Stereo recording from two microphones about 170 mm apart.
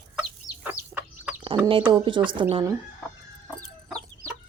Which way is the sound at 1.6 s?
30° right (ahead or behind).